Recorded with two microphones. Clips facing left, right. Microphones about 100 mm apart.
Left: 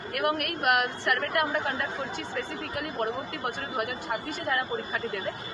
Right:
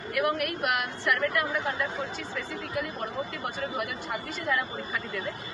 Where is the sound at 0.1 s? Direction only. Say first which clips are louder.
Right 1 dB; 50° left (ahead or behind).